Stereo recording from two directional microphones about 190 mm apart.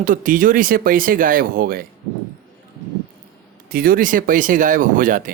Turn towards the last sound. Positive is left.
turn(degrees=-45)  # may be behind; listen again after turning